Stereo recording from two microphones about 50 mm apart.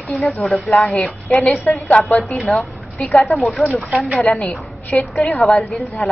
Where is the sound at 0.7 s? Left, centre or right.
Left.